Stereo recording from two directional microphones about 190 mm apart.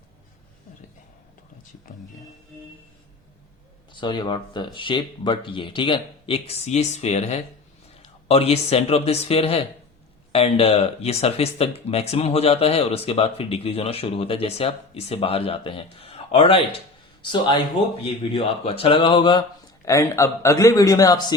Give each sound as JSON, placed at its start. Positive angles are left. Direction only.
{"t": 3.9, "sound": "speech", "side_deg": 25}
{"t": 18.0, "sound": "speech", "side_deg": 30}